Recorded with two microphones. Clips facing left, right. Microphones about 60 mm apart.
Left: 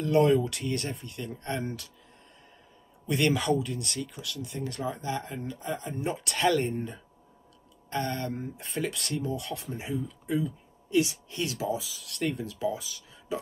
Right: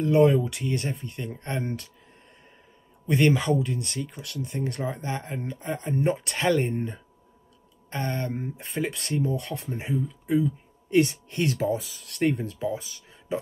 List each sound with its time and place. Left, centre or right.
0.0 s speech: right
3.1 s speech: right
4.2 s speech: right
10.9 s speech: right